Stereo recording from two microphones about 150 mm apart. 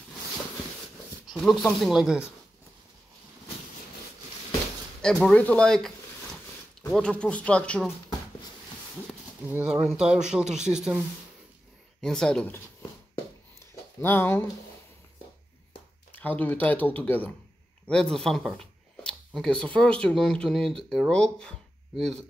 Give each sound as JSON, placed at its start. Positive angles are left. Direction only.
{"t": 1.2, "sound": "speech", "side_deg": 0}
{"t": 5.0, "sound": "speech", "side_deg": 5}
{"t": 9.5, "sound": "speech", "side_deg": -10}
{"t": 12.0, "sound": "speech", "side_deg": 5}
{"t": 14.0, "sound": "speech", "side_deg": 15}
{"t": 16.1, "sound": "speech", "side_deg": 10}